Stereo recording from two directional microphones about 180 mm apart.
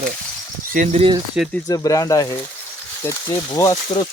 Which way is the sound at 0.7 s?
40° right (ahead or behind).